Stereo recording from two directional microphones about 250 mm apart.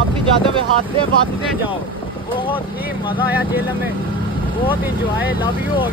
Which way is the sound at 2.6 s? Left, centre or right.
Centre.